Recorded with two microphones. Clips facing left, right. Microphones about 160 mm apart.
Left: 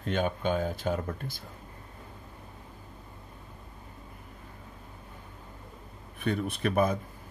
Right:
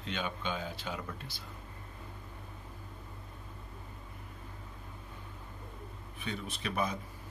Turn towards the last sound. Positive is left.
turn(degrees=50)  # may be behind; listen again after turning